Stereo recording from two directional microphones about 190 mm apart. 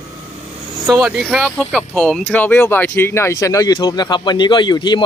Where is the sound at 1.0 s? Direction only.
5° right (ahead or behind).